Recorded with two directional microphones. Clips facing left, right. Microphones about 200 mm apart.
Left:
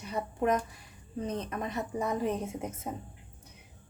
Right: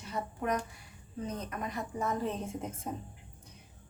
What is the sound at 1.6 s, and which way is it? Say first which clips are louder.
A woman's voice: left 1 dB; 20° left (ahead or behind).